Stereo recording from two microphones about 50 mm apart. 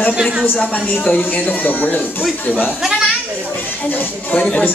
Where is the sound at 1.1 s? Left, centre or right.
Left.